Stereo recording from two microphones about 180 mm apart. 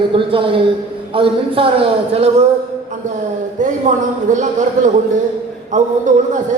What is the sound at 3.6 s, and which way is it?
A man's voice, 45° right (ahead or behind).